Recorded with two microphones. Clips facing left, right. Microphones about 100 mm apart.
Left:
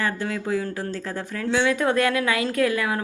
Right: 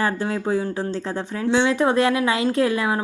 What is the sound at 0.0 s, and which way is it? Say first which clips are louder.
A woman's voice: right 4 dB; 30° right (ahead or behind).